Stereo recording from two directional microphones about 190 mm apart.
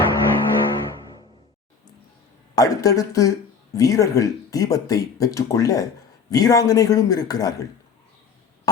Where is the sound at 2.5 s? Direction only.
20° left (ahead or behind).